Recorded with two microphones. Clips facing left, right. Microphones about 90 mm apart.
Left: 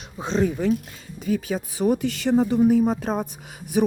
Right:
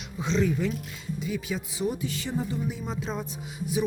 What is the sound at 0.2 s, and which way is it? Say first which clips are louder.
Speech: left 3 dB; 45° left (ahead or behind).